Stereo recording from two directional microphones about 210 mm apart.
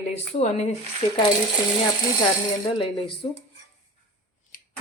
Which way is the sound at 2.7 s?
25° left (ahead or behind).